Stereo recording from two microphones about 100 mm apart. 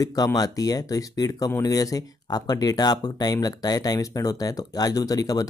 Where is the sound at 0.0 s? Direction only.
40° left (ahead or behind).